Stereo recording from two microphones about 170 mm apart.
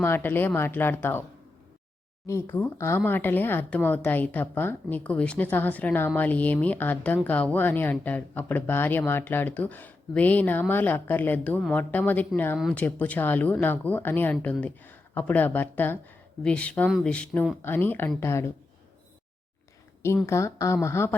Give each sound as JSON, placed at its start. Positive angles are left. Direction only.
{"t": 0.0, "sound": "speech", "side_deg": 10}
{"t": 2.2, "sound": "speech", "side_deg": 15}
{"t": 20.2, "sound": "speech", "side_deg": 15}